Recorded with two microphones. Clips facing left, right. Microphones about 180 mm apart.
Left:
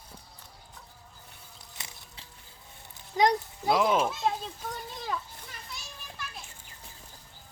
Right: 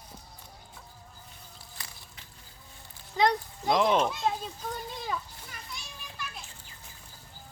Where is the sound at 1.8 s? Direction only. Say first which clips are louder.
Left 3 dB; 30° left (ahead or behind).